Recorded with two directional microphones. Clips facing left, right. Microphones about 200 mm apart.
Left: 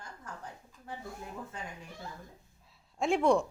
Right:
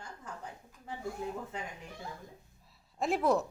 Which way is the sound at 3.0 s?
Centre (ahead or behind).